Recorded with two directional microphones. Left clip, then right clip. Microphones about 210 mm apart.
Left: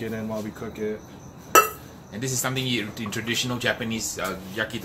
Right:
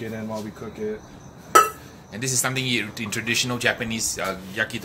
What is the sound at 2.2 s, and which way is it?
Speech, 20° right (ahead or behind).